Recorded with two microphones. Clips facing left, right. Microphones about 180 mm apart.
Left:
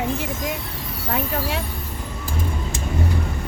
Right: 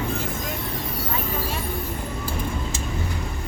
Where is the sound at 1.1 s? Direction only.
70° left (ahead or behind).